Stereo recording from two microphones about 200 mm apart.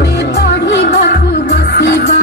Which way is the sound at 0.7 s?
60° left (ahead or behind).